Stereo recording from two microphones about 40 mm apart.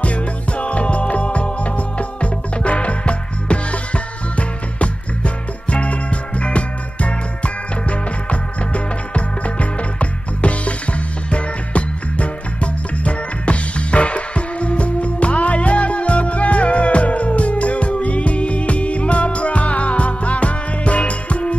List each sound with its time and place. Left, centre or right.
0.0 s music: left